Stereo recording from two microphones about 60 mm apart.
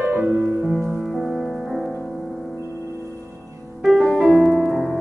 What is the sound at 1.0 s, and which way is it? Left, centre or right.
Music, centre.